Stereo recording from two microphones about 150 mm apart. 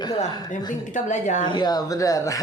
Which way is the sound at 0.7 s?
55° left (ahead or behind).